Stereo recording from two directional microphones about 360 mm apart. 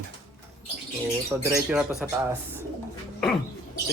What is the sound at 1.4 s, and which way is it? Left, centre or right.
Speech, centre.